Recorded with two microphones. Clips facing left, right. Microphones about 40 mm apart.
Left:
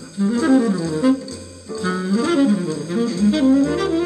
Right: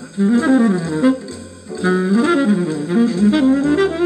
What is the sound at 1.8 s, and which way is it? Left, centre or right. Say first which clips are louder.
Saxophone: right 5 dB; right.